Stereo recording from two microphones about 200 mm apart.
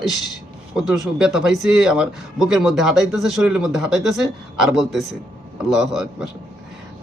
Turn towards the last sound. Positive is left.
turn(degrees=0)  # may be behind; listen again after turning